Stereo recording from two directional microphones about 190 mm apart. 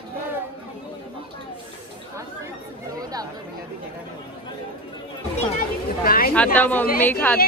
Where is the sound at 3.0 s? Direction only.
20° right (ahead or behind).